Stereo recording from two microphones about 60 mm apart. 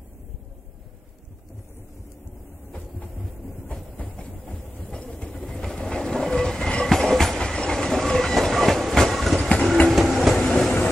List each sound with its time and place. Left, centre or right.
3.9 s train: left
4.9 s train: centre
5.4 s train: centre